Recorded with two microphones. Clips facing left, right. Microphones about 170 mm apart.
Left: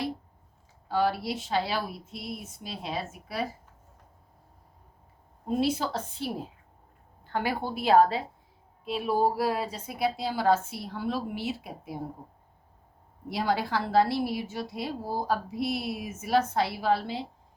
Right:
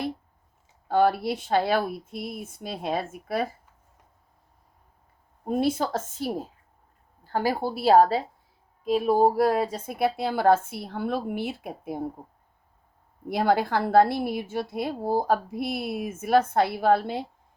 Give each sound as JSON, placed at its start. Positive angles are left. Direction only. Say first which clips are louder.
{"t": 0.9, "sound": "a woman's voice", "louder": "right 5 dB", "side_deg": -55}
{"t": 5.5, "sound": "a woman's voice", "louder": "right 3 dB", "side_deg": -50}
{"t": 13.2, "sound": "a woman's voice", "louder": "right 5 dB", "side_deg": -50}